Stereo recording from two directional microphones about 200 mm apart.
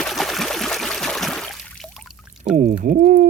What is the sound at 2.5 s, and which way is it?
Speech, 40° right (ahead or behind).